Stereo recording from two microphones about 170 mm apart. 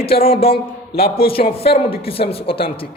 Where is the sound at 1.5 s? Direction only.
35° left (ahead or behind).